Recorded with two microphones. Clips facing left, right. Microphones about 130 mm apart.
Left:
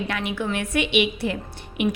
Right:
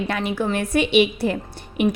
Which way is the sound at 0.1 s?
35° right (ahead or behind).